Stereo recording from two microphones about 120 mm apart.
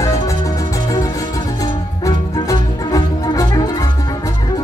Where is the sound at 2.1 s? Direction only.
30° left (ahead or behind).